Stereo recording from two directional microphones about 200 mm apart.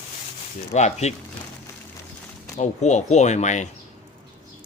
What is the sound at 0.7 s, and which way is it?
Speech, 35° left (ahead or behind).